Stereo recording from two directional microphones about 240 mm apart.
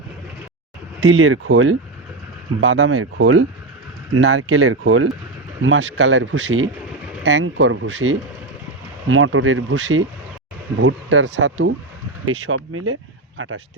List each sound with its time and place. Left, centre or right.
1.0 s speech: right